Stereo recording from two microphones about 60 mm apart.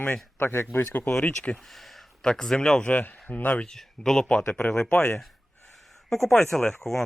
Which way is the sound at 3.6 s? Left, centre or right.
Centre.